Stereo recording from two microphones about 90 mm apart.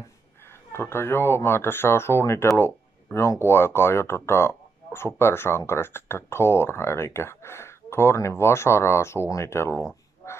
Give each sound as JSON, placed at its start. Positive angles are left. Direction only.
{"t": 0.7, "sound": "speech", "side_deg": 25}